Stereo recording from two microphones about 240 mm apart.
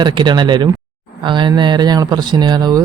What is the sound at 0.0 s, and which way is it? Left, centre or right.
Speech, centre.